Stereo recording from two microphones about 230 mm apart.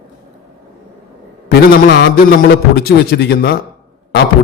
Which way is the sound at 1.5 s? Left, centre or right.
Left.